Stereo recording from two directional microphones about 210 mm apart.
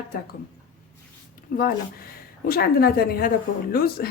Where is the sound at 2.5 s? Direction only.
45° left (ahead or behind).